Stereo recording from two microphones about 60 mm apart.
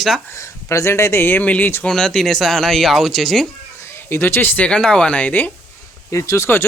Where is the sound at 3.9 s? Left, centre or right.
Left.